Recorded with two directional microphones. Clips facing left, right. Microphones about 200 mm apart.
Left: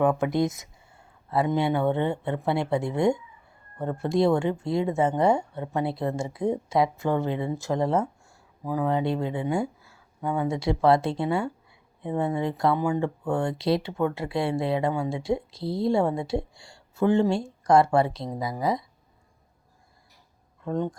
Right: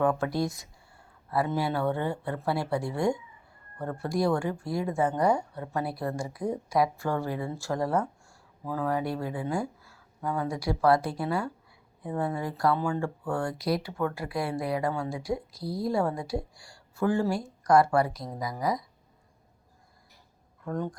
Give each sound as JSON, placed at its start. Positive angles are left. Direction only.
{"t": 0.0, "sound": "speech", "side_deg": 20}
{"t": 20.7, "sound": "speech", "side_deg": 20}